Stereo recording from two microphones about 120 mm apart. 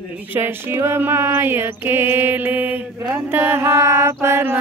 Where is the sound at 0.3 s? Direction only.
15° right (ahead or behind).